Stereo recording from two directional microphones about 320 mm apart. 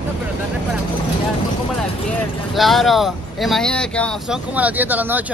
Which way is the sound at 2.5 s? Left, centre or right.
Centre.